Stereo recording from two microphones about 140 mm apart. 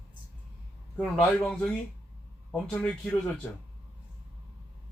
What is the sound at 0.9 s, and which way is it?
A man's voice, 5° left (ahead or behind).